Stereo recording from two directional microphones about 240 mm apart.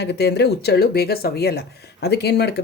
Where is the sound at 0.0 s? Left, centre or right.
Left.